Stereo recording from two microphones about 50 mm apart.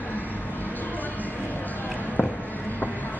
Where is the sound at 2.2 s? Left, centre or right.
Left.